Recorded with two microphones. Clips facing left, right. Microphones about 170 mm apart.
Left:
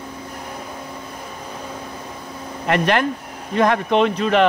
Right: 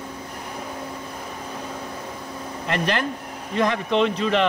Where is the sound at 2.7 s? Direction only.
60° left (ahead or behind).